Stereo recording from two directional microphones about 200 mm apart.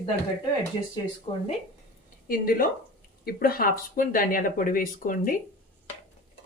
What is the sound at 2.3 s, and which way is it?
Speech, 45° left (ahead or behind).